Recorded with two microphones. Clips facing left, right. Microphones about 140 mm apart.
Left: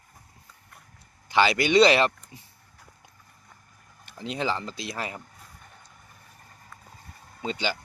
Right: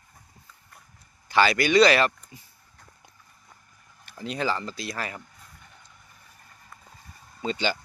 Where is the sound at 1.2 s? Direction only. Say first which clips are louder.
Even; 20° left (ahead or behind).